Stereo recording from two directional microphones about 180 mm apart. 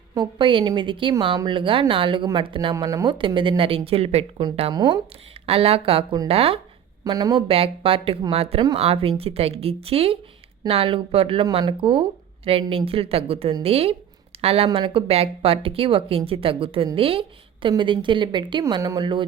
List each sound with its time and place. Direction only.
0.1 s speech: 25° right (ahead or behind)
2.7 s speech: 20° right (ahead or behind)
5.5 s a woman's voice: 35° right (ahead or behind)
7.0 s a woman's voice: 20° right (ahead or behind)